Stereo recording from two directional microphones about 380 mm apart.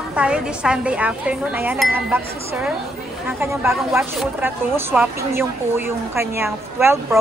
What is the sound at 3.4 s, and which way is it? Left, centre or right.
Speech, centre.